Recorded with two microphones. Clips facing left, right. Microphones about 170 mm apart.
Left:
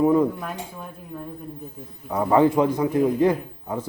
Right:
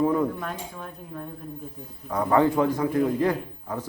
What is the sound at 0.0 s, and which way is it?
Speech, 20° left (ahead or behind).